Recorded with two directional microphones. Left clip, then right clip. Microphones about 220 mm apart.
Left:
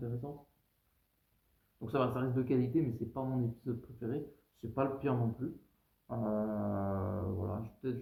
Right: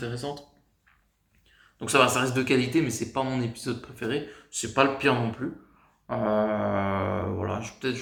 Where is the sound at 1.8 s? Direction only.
10° right (ahead or behind).